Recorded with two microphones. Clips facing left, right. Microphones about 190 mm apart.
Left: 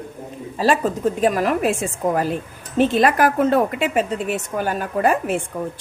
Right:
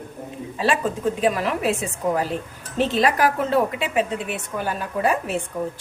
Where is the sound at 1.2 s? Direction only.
45° left (ahead or behind).